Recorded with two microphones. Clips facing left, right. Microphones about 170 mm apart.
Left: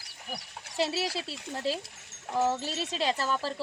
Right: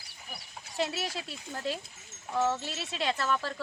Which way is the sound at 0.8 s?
35° left (ahead or behind).